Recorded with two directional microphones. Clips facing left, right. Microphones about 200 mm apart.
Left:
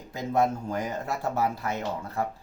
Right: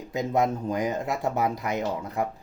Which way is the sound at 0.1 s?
15° right (ahead or behind).